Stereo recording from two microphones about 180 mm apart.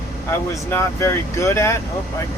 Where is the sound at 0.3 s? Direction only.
15° left (ahead or behind).